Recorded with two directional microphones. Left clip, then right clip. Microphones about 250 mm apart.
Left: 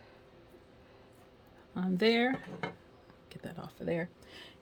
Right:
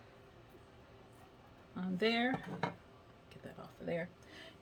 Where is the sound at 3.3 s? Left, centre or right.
Left.